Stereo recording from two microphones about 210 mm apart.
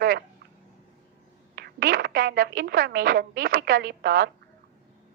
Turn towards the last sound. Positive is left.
turn(degrees=-45)  # may be behind; listen again after turning